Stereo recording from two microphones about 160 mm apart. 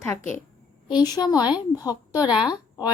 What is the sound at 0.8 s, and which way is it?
A woman's voice, 25° left (ahead or behind).